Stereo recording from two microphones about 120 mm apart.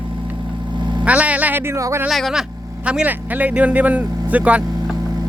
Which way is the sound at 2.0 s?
5° right (ahead or behind).